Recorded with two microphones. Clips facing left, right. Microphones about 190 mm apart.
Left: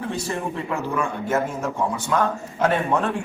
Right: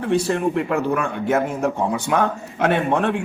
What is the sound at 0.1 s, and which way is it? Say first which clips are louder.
A man's voice: right 13 dB; 65° right (ahead or behind).